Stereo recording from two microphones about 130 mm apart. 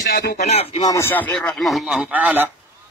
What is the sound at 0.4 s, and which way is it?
Speech, 60° left (ahead or behind).